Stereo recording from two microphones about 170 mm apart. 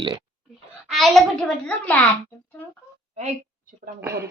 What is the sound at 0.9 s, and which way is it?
A child's voice, centre (ahead or behind).